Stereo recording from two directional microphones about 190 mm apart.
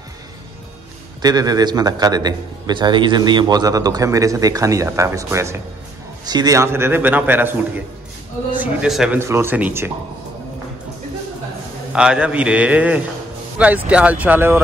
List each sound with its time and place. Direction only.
1.2 s a man's voice: 20° right (ahead or behind)
8.5 s a man's voice: centre (ahead or behind)
9.2 s a man's voice: 15° right (ahead or behind)
11.9 s a man's voice: 5° right (ahead or behind)